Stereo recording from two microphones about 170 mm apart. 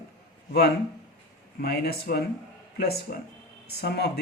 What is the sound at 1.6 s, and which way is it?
A man's voice, 65° left (ahead or behind).